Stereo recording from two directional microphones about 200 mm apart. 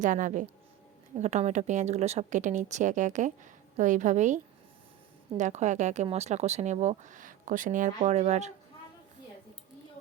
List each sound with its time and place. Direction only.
0.0 s a woman's voice: 40° right (ahead or behind)
5.4 s a woman's voice: 35° right (ahead or behind)